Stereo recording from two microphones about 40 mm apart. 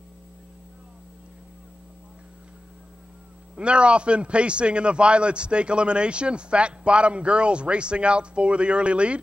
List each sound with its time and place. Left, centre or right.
3.5 s a man's voice: right